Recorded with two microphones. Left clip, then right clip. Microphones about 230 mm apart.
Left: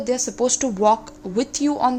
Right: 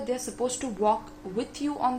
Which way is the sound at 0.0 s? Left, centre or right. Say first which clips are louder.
Left 8 dB; left.